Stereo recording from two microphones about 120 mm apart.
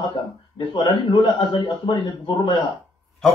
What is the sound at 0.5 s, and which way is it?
A man's voice, 40° left (ahead or behind).